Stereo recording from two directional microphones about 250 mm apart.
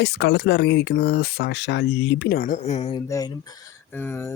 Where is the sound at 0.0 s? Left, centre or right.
Left.